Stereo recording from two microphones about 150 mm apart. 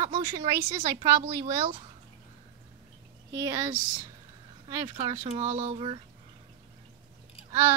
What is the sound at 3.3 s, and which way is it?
Speech, 20° right (ahead or behind).